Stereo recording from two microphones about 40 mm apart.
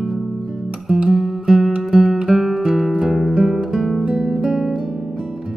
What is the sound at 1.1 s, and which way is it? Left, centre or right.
Music, centre.